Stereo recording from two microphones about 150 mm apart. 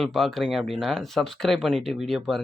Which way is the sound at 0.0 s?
Centre (ahead or behind).